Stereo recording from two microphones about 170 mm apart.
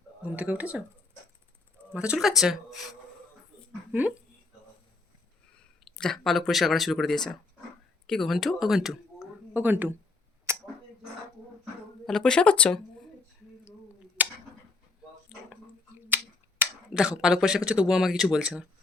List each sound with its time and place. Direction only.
0.2 s speech: 10° right (ahead or behind)
1.9 s speech: 5° right (ahead or behind)
3.9 s speech: 10° right (ahead or behind)
5.8 s speech: centre (ahead or behind)
10.5 s a sound: 15° right (ahead or behind)
11.6 s a sound: 5° left (ahead or behind)
14.2 s a sound: 10° right (ahead or behind)
16.0 s finger snapping: 10° right (ahead or behind)
17.7 s speech: 5° right (ahead or behind)